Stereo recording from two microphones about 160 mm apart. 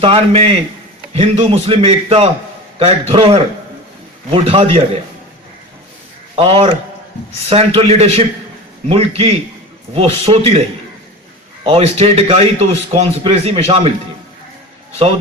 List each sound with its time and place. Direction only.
0.0 s a man's voice: 35° right (ahead or behind)
6.3 s a man's voice: 35° right (ahead or behind)
11.6 s a man's voice: 40° right (ahead or behind)